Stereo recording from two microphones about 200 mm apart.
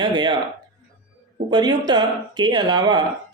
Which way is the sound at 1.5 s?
20° right (ahead or behind).